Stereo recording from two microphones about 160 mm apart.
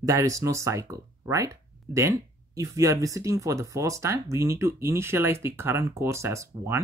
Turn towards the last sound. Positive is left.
turn(degrees=-20)  # may be behind; listen again after turning